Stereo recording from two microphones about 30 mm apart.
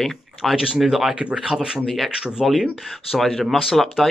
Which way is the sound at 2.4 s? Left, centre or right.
Centre.